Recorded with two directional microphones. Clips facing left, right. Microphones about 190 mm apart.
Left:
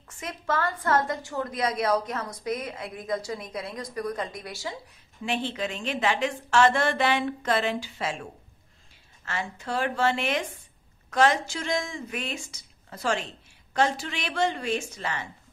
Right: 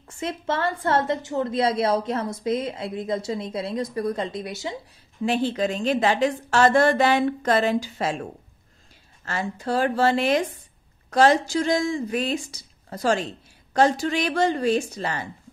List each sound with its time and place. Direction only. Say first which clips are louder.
0.0 s a woman's voice: right 7 dB; 30° right (ahead or behind)
5.2 s a woman's voice: right 7 dB; 40° right (ahead or behind)